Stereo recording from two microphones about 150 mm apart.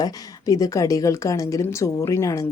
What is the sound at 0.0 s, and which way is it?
Speech, 25° left (ahead or behind).